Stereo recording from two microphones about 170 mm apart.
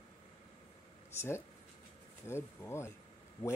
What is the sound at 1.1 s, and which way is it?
Speech, 15° left (ahead or behind).